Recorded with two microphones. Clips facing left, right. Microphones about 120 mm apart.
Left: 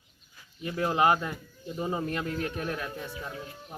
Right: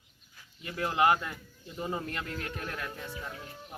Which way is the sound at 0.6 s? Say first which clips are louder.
Left 2 dB; 25° left (ahead or behind).